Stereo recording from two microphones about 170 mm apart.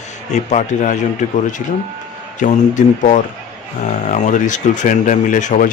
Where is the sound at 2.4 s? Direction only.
50° left (ahead or behind).